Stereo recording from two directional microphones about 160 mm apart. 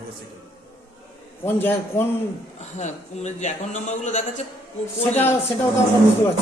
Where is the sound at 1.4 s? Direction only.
15° left (ahead or behind).